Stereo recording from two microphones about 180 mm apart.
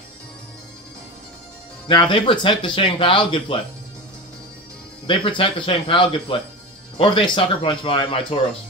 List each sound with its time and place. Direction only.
1.9 s speech: 25° left (ahead or behind)
5.0 s speech: 30° left (ahead or behind)